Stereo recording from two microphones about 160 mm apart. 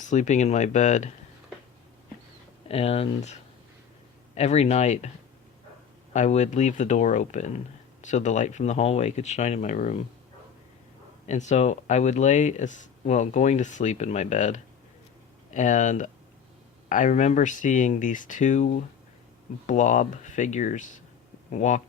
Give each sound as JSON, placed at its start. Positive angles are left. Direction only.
{"t": 0.0, "sound": "speech", "side_deg": 50}
{"t": 2.6, "sound": "speech", "side_deg": 40}
{"t": 4.4, "sound": "speech", "side_deg": 45}
{"t": 6.1, "sound": "speech", "side_deg": 45}
{"t": 11.3, "sound": "speech", "side_deg": 45}